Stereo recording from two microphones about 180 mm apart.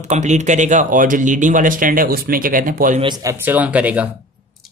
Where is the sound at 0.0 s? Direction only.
40° right (ahead or behind).